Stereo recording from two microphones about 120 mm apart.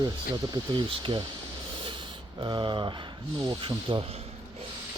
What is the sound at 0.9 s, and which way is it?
Speech, 45° right (ahead or behind).